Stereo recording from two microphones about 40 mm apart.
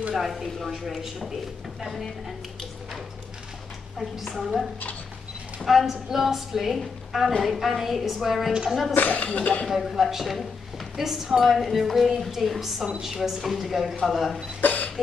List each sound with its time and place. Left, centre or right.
0.1 s a woman's voice: centre
4.4 s a woman's voice: centre
5.7 s a woman's voice: centre
8.5 s a woman's voice: centre
8.9 s speech: left
9.7 s a woman's voice: centre
14.6 s a sound: left